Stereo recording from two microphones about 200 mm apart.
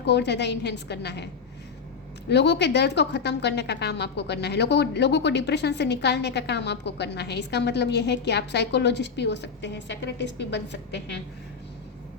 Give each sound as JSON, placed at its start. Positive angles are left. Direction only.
{"t": 0.0, "sound": "a woman's voice", "side_deg": 60}
{"t": 2.3, "sound": "a woman's voice", "side_deg": 60}